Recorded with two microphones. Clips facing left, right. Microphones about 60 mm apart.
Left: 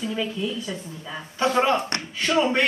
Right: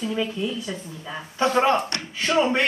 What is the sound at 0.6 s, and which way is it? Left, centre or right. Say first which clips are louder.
A woman's voice: even; centre.